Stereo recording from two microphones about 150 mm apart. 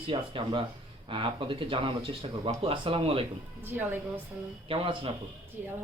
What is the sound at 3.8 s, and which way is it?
Speech, 10° right (ahead or behind).